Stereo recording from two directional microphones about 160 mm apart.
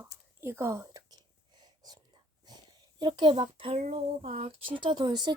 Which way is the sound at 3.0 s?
30° right (ahead or behind).